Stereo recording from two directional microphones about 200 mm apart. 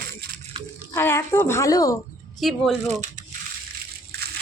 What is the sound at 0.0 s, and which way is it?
Crunch, 55° right (ahead or behind).